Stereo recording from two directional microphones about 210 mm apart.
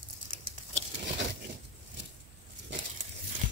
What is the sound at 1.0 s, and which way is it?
Biting, 60° right (ahead or behind).